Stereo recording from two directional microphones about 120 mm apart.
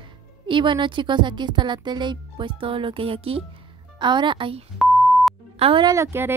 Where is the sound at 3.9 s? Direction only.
40° right (ahead or behind).